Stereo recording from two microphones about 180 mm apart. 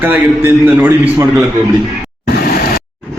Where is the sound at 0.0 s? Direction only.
10° right (ahead or behind).